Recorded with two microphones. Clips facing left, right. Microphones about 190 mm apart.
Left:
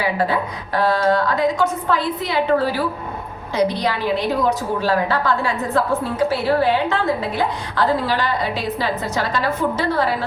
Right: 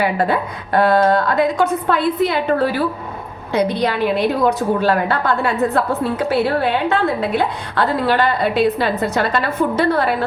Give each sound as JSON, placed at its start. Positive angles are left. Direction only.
{"t": 0.0, "sound": "a woman's voice", "side_deg": -55}